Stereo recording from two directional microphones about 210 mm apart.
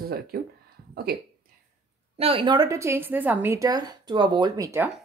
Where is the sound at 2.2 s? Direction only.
25° right (ahead or behind).